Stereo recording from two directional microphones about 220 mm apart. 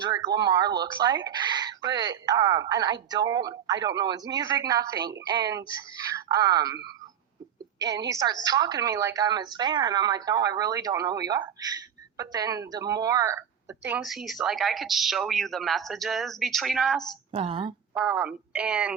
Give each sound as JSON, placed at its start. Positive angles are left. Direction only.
{"t": 0.0, "sound": "a woman's voice", "side_deg": -20}
{"t": 7.8, "sound": "a woman's voice", "side_deg": -15}
{"t": 17.3, "sound": "speech", "side_deg": -25}
{"t": 17.9, "sound": "a woman's voice", "side_deg": -5}